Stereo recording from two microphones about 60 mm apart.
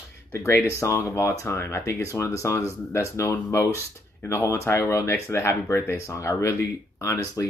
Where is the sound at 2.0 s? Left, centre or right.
Left.